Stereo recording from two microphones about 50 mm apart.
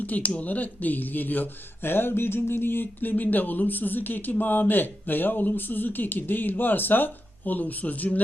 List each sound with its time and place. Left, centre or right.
0.0 s speech: left